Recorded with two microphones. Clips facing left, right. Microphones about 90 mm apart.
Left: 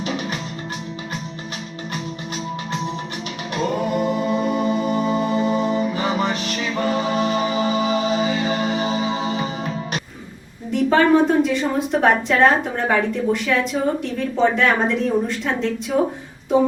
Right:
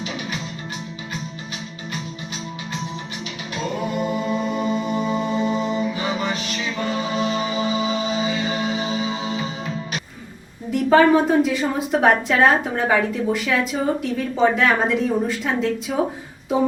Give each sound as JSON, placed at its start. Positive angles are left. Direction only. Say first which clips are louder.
{"t": 4.4, "sound": "music", "louder": "left 3 dB", "side_deg": 50}
{"t": 10.7, "sound": "a woman's voice", "louder": "right 1 dB", "side_deg": 0}